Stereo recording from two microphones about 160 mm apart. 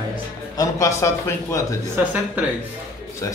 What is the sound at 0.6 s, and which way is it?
A man's voice, 20° left (ahead or behind).